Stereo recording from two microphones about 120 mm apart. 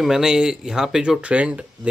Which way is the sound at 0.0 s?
5° right (ahead or behind).